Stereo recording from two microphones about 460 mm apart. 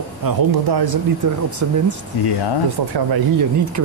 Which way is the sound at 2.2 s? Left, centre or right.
Left.